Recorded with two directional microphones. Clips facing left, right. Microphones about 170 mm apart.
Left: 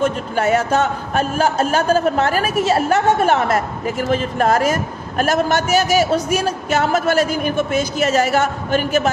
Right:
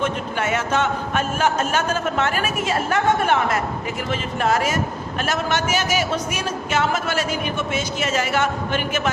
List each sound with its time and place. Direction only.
0.0 s a man's voice: 40° left (ahead or behind)